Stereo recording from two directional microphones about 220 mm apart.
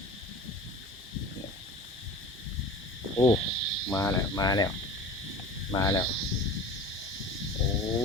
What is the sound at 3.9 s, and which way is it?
Speech, 10° left (ahead or behind).